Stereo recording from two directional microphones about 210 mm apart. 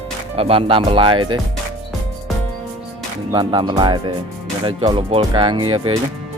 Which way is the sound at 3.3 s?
20° right (ahead or behind).